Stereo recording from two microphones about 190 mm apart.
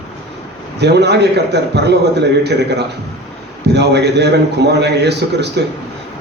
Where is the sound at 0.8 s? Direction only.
60° right (ahead or behind).